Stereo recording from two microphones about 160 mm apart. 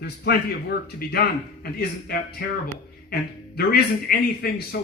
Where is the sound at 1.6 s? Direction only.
75° left (ahead or behind).